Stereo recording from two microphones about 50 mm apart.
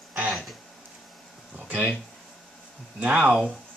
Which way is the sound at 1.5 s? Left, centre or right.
Right.